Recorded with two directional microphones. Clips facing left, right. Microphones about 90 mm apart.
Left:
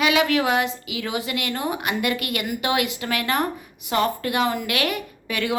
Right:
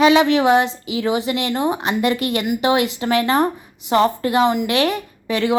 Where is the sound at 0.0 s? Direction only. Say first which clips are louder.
Right 7 dB; 25° right (ahead or behind).